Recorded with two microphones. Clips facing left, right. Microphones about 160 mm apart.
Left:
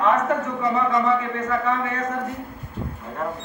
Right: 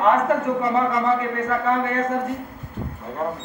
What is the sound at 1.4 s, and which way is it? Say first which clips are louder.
Speech: right 2 dB; 30° right (ahead or behind).